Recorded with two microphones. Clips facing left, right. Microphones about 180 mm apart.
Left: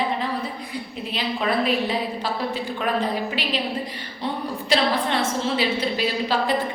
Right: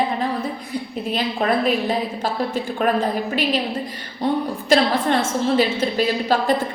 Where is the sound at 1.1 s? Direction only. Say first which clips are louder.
Right 4 dB; 45° right (ahead or behind).